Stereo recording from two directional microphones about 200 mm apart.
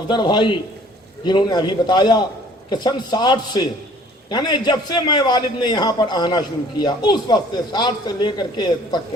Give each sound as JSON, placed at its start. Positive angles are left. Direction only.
{"t": 0.1, "sound": "a man's voice", "side_deg": 20}